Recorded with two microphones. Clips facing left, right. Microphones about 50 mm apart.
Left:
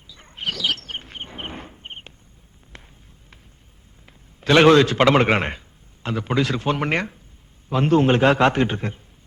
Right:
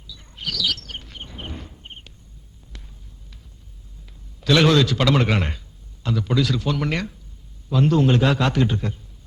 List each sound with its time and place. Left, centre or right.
0.1 s bird: left
2.7 s a sound: left
4.0 s a man's voice: left